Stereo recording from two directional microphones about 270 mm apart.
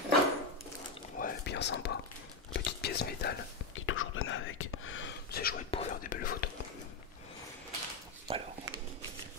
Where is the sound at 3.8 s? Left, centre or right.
Left.